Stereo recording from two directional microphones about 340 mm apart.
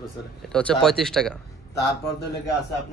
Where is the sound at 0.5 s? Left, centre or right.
Centre.